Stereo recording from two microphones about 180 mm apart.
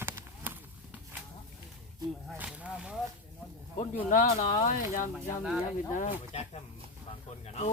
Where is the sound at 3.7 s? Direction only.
45° left (ahead or behind).